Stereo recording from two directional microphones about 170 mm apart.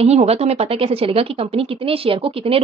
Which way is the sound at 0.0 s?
40° right (ahead or behind).